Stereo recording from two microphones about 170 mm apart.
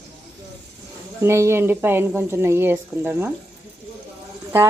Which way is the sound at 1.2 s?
15° right (ahead or behind).